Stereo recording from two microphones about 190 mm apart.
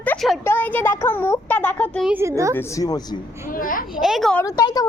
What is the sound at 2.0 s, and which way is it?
Speech, 15° right (ahead or behind).